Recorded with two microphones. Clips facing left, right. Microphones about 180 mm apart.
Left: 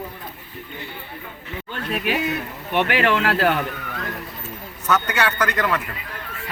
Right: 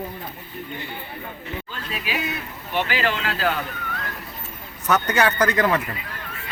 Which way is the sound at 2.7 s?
65° left (ahead or behind).